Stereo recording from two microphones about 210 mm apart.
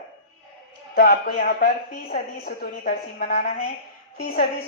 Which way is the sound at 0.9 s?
45° left (ahead or behind).